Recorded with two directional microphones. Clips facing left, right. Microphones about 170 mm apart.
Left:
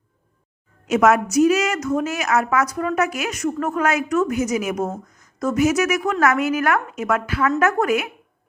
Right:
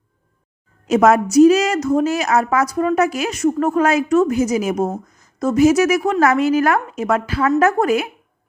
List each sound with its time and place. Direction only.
0.9 s a woman's voice: 30° right (ahead or behind)